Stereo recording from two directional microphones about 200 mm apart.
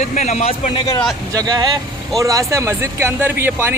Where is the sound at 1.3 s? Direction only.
20° right (ahead or behind).